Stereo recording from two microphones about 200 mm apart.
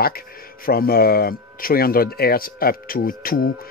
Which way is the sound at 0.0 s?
50° left (ahead or behind).